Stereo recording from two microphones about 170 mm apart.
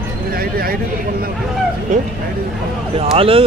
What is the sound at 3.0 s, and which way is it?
Speech, 35° right (ahead or behind).